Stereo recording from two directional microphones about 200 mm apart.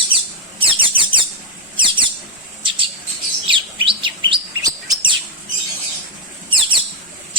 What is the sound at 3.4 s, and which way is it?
Chirp, 25° right (ahead or behind).